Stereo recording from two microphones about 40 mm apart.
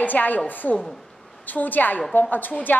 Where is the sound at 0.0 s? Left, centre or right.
Left.